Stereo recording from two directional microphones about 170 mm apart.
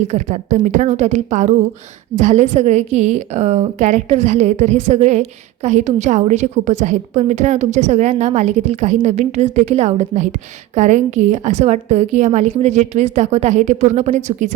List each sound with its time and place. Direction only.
0.1 s a woman's voice: 45° right (ahead or behind)